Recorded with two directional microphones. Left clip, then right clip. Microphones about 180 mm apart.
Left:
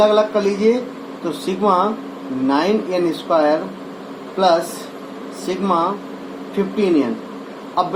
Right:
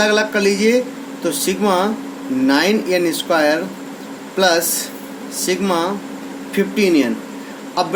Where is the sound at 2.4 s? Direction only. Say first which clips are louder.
Right 2 dB; 55° right (ahead or behind).